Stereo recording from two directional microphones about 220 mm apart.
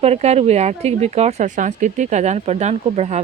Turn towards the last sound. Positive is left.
turn(degrees=-30)  # may be behind; listen again after turning